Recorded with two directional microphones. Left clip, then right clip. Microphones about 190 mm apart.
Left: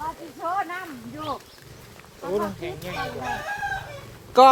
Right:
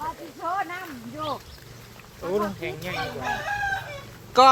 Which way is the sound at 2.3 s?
30° right (ahead or behind).